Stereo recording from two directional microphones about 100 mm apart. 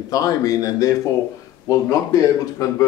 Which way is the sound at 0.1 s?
35° left (ahead or behind).